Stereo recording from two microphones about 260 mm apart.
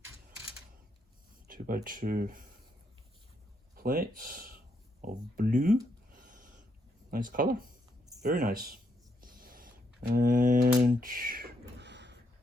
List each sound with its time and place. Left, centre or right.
1.5 s speech: right
3.8 s speech: right
6.1 s a sound: right
7.1 s speech: right
11.8 s door: right